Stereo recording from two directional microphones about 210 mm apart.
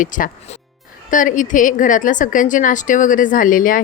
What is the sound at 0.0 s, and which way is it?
A woman's voice, 40° left (ahead or behind).